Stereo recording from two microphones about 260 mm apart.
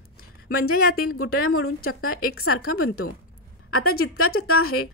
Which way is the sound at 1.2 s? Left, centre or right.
Left.